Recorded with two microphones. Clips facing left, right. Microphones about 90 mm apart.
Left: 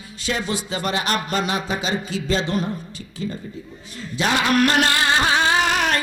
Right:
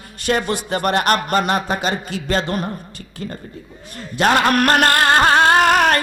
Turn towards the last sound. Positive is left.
turn(degrees=-50)  # may be behind; listen again after turning